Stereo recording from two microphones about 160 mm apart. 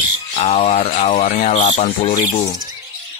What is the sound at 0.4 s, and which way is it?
Speech, 40° left (ahead or behind).